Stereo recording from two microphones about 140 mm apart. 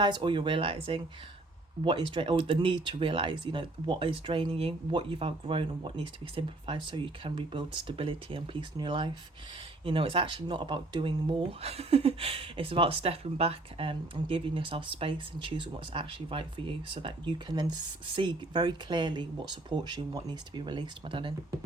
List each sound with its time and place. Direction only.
0.0 s speech: 30° right (ahead or behind)